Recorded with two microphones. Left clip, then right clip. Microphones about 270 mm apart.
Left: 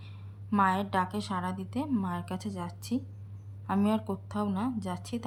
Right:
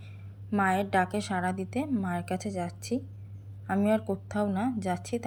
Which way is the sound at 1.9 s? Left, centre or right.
Left.